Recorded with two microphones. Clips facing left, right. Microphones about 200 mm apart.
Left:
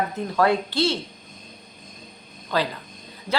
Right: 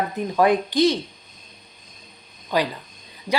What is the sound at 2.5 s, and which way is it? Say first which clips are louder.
Speech: right 2 dB; 15° right (ahead or behind).